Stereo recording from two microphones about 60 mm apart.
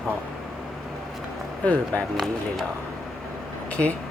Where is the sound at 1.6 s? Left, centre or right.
Left.